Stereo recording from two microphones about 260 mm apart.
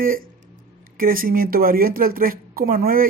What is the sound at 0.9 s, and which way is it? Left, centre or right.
Speech, right.